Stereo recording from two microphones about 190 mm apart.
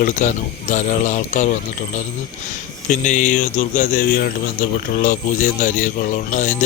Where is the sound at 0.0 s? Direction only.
40° left (ahead or behind).